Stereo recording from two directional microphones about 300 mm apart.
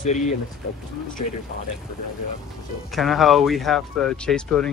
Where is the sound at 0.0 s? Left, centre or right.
Left.